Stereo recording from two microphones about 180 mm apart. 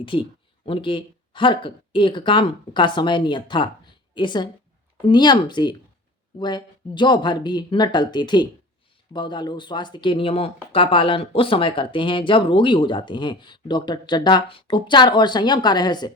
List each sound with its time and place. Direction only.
0.0 s speech: 30° left (ahead or behind)